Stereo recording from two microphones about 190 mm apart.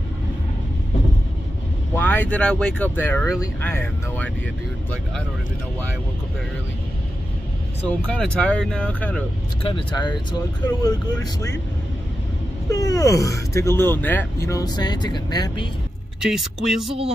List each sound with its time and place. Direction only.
2.0 s speech: 10° left (ahead or behind)
8.1 s speech: 5° left (ahead or behind)
9.6 s speech: 30° left (ahead or behind)
12.6 s speech: 15° left (ahead or behind)
16.2 s speech: 5° right (ahead or behind)